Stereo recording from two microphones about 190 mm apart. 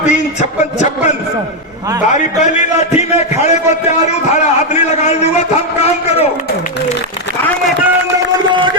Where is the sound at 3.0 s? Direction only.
35° left (ahead or behind).